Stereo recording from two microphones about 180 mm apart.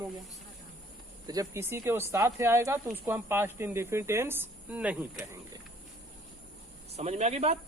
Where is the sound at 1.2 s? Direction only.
15° right (ahead or behind).